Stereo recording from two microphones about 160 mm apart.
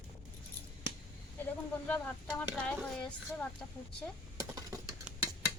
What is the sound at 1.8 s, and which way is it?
Speech, 10° left (ahead or behind).